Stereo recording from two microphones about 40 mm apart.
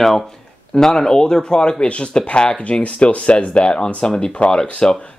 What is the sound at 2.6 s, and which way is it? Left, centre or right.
Speech, left.